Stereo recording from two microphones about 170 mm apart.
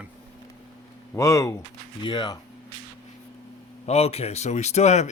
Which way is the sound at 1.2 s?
20° left (ahead or behind).